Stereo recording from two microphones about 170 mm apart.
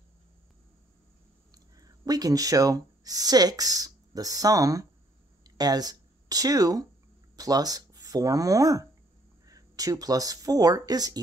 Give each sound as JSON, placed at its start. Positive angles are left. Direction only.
{"t": 1.5, "sound": "speech", "side_deg": -20}